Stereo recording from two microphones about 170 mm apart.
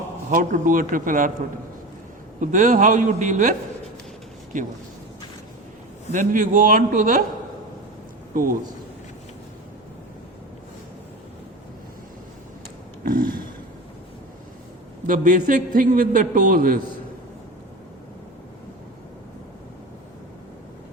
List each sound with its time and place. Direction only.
0.3 s a man's voice: 50° right (ahead or behind)
2.4 s a man's voice: 50° right (ahead or behind)
4.5 s a man's voice: 50° right (ahead or behind)
6.1 s a man's voice: 50° right (ahead or behind)
8.3 s speech: 55° right (ahead or behind)
13.1 s a sound: 55° right (ahead or behind)
15.0 s a man's voice: 50° right (ahead or behind)